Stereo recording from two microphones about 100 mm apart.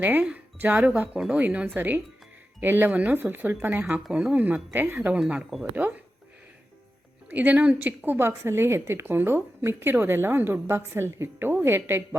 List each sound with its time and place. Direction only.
0.0 s a woman's voice: 15° right (ahead or behind)
7.3 s a woman's voice: 15° right (ahead or behind)